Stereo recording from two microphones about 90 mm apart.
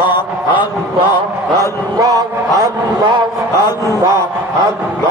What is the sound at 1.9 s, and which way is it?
Speech, 45° right (ahead or behind).